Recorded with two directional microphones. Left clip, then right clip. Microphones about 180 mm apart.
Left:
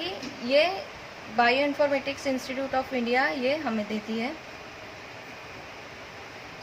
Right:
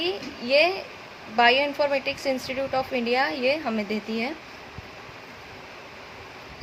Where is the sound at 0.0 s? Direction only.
35° right (ahead or behind).